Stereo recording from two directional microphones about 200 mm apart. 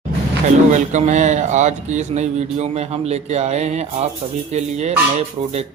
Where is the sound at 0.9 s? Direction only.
35° right (ahead or behind).